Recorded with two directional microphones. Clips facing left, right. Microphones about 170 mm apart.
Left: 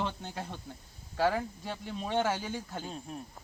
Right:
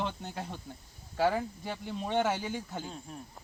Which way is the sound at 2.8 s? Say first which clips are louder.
Left 2 dB; 20° left (ahead or behind).